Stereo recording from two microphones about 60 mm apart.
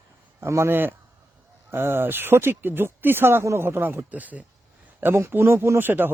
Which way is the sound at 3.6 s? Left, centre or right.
Right.